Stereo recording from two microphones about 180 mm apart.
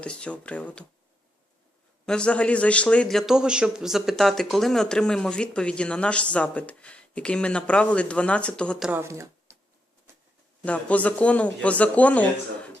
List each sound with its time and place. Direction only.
0.0 s a man's voice: 5° left (ahead or behind)
2.0 s a man's voice: 5° left (ahead or behind)
8.9 s speech: 15° right (ahead or behind)
10.7 s a man's voice: 10° left (ahead or behind)